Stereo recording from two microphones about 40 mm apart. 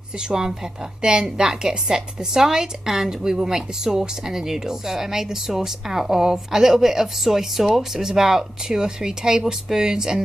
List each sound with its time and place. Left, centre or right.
0.3 s a woman's voice: centre